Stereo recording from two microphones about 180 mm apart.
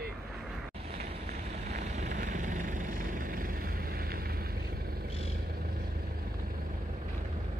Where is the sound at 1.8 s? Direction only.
40° right (ahead or behind).